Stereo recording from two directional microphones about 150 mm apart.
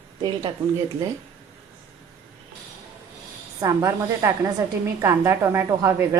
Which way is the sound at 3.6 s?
20° right (ahead or behind).